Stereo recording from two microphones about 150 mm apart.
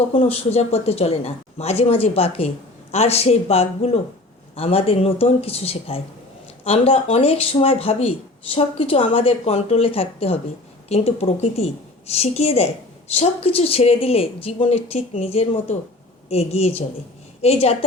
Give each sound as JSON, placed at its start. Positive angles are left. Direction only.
{"t": 0.1, "sound": "a woman's voice", "side_deg": 45}